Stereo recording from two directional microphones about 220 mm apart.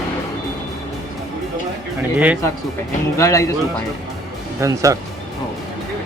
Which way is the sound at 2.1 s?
5° right (ahead or behind).